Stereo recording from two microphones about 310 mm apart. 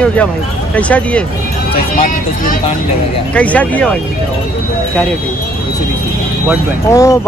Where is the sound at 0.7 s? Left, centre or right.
Centre.